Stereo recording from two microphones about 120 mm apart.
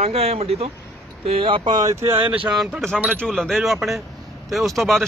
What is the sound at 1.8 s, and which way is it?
Speech, 25° right (ahead or behind).